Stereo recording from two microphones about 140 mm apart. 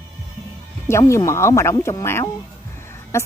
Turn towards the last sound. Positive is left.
turn(degrees=20)  # may be behind; listen again after turning